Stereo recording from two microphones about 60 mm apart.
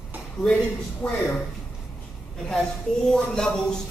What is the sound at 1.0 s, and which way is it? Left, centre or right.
Speech, centre.